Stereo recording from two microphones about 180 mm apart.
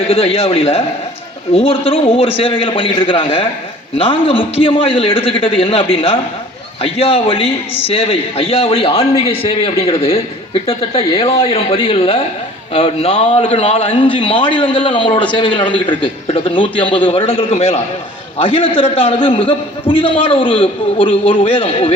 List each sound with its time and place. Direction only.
0.1 s a man's voice: 30° left (ahead or behind)